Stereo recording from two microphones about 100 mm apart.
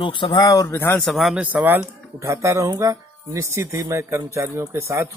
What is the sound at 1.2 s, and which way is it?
Speech, 10° right (ahead or behind).